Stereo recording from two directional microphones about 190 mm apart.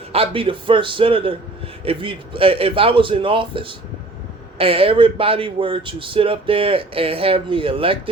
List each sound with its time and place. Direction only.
0.1 s speech: 30° right (ahead or behind)